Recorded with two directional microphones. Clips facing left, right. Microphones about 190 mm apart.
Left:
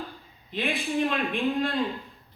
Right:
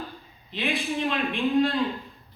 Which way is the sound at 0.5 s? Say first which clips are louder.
Even; 50° left (ahead or behind).